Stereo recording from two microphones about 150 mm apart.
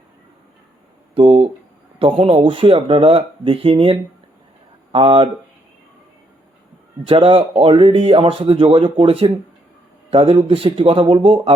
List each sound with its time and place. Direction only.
1.1 s a sound: 35° right (ahead or behind)
2.0 s speech: 40° right (ahead or behind)
7.0 s speech: 40° right (ahead or behind)